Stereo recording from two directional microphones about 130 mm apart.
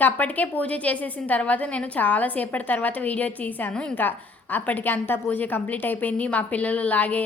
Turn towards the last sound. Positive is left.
turn(degrees=10)  # may be behind; listen again after turning